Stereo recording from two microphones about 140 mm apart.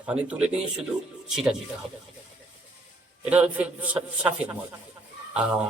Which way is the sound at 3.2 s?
10° right (ahead or behind).